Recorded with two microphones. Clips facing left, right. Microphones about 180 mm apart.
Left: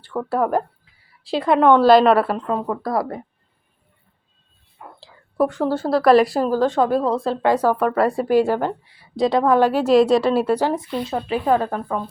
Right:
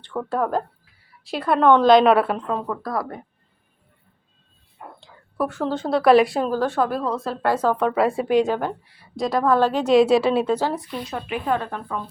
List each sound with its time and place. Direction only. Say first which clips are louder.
0.0 s a woman's voice: left 3 dB; 5° left (ahead or behind)
2.6 s a woman's voice: left 4 dB; 25° left (ahead or behind)
5.4 s speech: left 4 dB; 15° left (ahead or behind)
6.5 s a woman's voice: left 4 dB; 15° left (ahead or behind); by 8.4 s centre (ahead or behind)
8.4 s a woman's voice: left 3 dB; 10° left (ahead or behind)
9.1 s a woman's voice: left 3 dB; 25° left (ahead or behind); by 10.5 s centre (ahead or behind)
10.5 s a woman's voice: left 3 dB; 15° left (ahead or behind)
10.9 s speech: left 5 dB; 30° left (ahead or behind)